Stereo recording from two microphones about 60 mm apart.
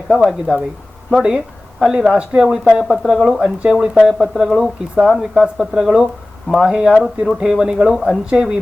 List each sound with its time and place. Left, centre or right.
0.1 s speech: centre